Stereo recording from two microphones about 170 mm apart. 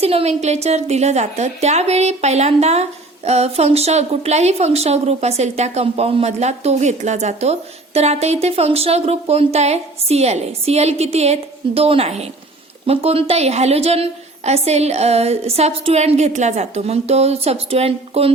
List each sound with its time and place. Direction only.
0.0 s a woman's voice: 35° right (ahead or behind)